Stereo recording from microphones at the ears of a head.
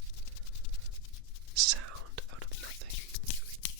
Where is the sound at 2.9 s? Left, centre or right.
Left.